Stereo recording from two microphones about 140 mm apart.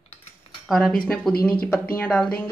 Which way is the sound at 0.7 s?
Centre (ahead or behind).